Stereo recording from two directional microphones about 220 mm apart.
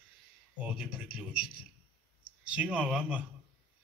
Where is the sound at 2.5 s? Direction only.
5° right (ahead or behind).